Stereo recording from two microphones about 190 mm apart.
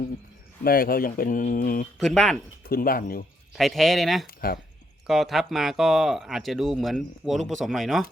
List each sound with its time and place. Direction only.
0.6 s speech: 50° left (ahead or behind)
2.0 s speech: centre (ahead or behind)
2.6 s speech: 50° left (ahead or behind)
3.5 s speech: centre (ahead or behind)
4.3 s speech: 50° left (ahead or behind)
5.0 s speech: centre (ahead or behind)